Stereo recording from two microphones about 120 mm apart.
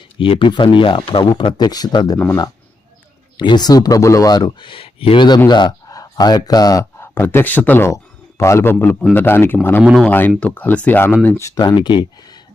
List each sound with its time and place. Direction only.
0.2 s speech: 45° left (ahead or behind)
2.1 s speech: 10° left (ahead or behind)
3.3 s speech: 40° left (ahead or behind)
7.0 s a man's voice: 20° left (ahead or behind)
11.6 s speech: 40° left (ahead or behind)